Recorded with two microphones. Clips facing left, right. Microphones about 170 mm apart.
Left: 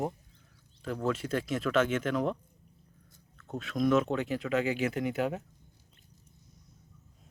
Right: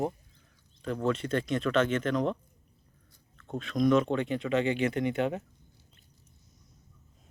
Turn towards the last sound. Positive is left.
turn(degrees=5)  # may be behind; listen again after turning